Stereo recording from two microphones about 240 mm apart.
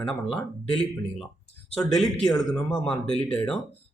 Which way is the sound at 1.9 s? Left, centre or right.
Centre.